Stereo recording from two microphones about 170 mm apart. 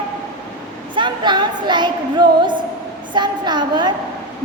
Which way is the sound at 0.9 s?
25° right (ahead or behind).